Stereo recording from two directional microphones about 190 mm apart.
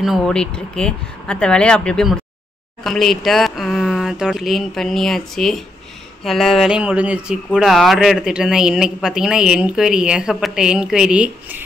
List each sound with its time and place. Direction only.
0.0 s speech: centre (ahead or behind)